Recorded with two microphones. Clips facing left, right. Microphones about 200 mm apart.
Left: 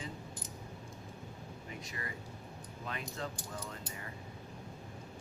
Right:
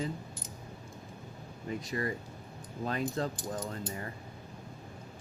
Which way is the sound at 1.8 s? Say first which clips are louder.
Right 10 dB; 35° right (ahead or behind).